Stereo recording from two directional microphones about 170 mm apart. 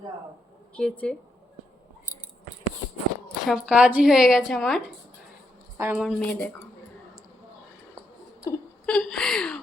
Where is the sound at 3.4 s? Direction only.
5° right (ahead or behind).